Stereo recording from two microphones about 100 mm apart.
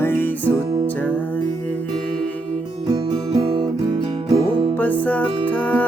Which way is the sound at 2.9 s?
45° right (ahead or behind).